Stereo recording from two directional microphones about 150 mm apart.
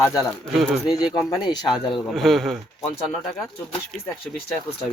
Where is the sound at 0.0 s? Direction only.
20° left (ahead or behind).